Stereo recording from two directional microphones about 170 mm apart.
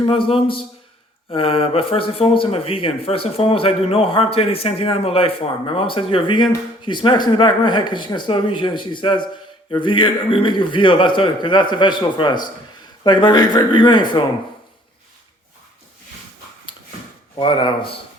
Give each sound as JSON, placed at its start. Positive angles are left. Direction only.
{"t": 0.0, "sound": "speech", "side_deg": 30}
{"t": 17.3, "sound": "speech", "side_deg": 30}